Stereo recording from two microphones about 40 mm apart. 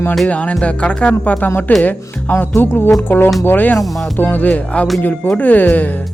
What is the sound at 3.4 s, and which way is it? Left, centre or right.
Speech, left.